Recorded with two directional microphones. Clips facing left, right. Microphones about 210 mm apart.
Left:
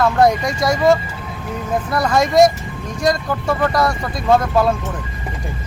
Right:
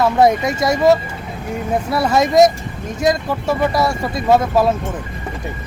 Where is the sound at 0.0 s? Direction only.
5° right (ahead or behind).